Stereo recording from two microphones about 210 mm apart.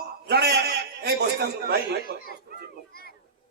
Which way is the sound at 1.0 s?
50° right (ahead or behind).